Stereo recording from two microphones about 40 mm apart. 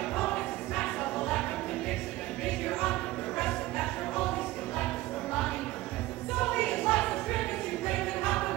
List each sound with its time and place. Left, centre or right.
0.2 s music: centre
2.6 s music: centre
6.4 s music: centre